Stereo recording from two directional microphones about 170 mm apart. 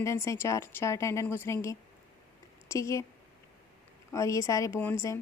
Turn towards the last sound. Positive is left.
turn(degrees=15)  # may be behind; listen again after turning